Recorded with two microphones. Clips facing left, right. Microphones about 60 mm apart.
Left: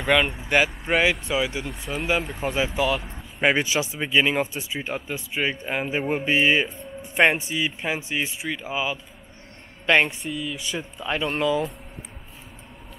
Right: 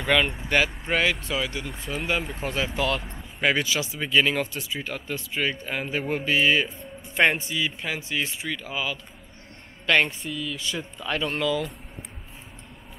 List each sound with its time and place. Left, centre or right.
0.0 s speech: centre
3.3 s speech: left
10.0 s speech: centre
11.2 s speech: left